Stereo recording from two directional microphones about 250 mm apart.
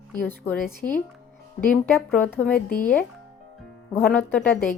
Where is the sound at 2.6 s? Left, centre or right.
Left.